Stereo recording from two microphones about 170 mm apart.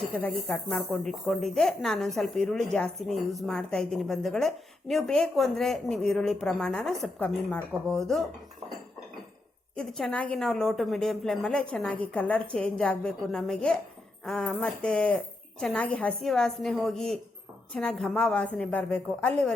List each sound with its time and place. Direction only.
0.2 s a woman's voice: 10° left (ahead or behind)
9.7 s a woman's voice: 5° left (ahead or behind)